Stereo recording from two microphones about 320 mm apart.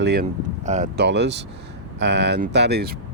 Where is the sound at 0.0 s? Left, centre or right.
Right.